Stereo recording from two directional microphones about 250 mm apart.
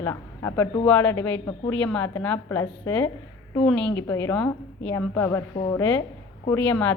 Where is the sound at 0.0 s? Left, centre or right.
Centre.